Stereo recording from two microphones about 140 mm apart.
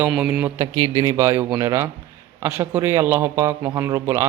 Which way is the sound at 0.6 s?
25° right (ahead or behind).